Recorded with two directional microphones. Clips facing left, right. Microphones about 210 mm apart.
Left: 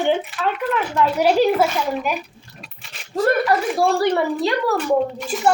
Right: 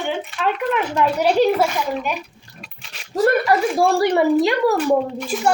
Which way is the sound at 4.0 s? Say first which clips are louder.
Right 3 dB; 15° right (ahead or behind).